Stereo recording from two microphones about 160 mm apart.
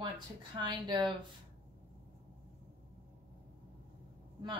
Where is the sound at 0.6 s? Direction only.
30° right (ahead or behind).